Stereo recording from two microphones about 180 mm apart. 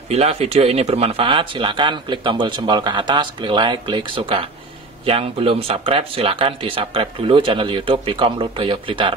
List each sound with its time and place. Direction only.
0.1 s speech: 35° right (ahead or behind)